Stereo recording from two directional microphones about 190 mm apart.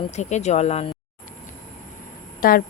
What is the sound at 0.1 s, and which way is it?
Speech, 35° left (ahead or behind).